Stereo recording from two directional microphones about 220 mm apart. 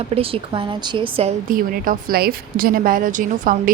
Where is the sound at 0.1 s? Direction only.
25° right (ahead or behind).